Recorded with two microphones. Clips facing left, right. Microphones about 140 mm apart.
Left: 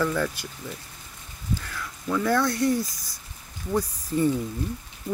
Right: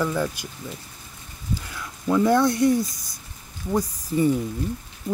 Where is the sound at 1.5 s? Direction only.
15° right (ahead or behind).